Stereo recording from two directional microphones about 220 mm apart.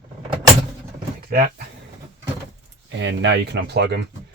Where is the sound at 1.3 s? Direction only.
40° right (ahead or behind).